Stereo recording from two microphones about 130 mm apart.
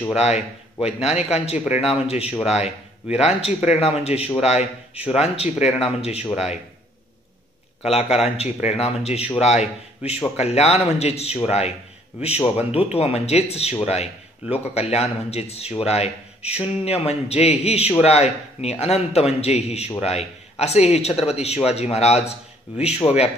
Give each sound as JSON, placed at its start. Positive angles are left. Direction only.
{"t": 0.8, "sound": "a man's voice", "side_deg": 50}
{"t": 7.9, "sound": "a man's voice", "side_deg": 50}